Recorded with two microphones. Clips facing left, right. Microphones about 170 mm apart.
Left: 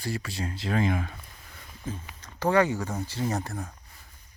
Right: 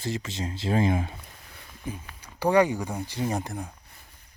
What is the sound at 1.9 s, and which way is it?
Speech, 15° right (ahead or behind).